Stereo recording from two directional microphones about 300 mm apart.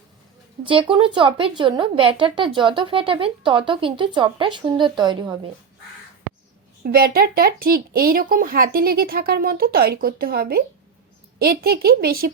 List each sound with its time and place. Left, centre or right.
0.6 s speech: centre
6.8 s speech: right